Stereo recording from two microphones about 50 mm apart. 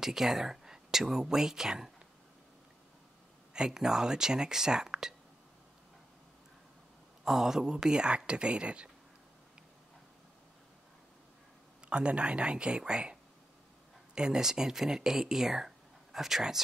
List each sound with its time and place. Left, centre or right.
0.0 s speech: centre
3.5 s speech: centre
7.2 s speech: centre
11.9 s speech: right